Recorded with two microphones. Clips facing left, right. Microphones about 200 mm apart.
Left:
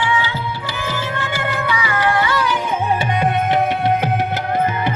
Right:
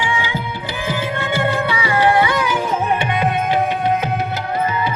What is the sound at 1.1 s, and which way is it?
Music, 25° right (ahead or behind).